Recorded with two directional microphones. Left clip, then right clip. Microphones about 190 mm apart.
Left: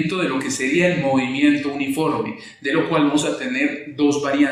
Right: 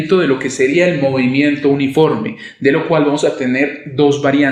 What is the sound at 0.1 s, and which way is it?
Speech, 40° right (ahead or behind).